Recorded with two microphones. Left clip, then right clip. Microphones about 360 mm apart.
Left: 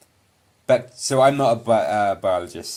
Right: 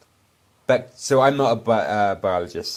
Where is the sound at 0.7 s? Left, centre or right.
Centre.